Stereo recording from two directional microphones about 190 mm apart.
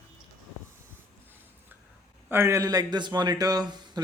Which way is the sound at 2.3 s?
10° right (ahead or behind).